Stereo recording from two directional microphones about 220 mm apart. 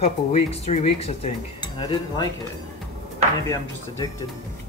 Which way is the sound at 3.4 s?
15° left (ahead or behind).